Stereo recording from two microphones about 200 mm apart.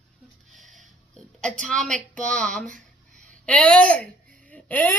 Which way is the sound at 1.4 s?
5° left (ahead or behind).